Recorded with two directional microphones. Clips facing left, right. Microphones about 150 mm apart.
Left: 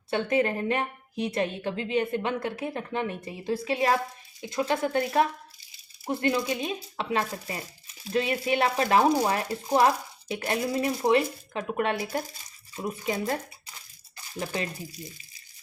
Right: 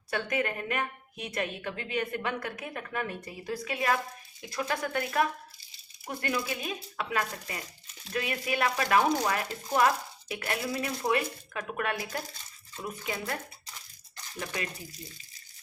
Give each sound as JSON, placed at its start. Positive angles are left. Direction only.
{"t": 0.1, "sound": "a woman's voice", "side_deg": 25}
{"t": 12.4, "sound": "bathtub", "side_deg": 10}
{"t": 12.9, "sound": "a woman's voice", "side_deg": 30}